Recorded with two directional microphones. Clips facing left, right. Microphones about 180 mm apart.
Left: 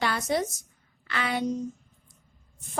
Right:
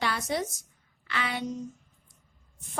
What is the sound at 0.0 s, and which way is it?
A woman's voice, 45° left (ahead or behind).